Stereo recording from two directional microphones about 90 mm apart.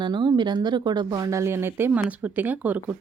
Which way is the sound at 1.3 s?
30° right (ahead or behind).